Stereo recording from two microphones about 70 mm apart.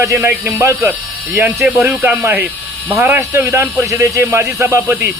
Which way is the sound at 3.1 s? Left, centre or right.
Right.